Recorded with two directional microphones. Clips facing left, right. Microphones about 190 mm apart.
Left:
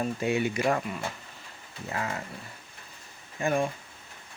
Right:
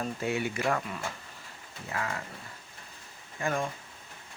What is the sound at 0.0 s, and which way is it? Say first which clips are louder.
Speech: left 4 dB; 20° left (ahead or behind).